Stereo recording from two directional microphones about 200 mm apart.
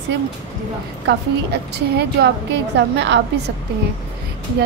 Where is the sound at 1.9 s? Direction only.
60° right (ahead or behind).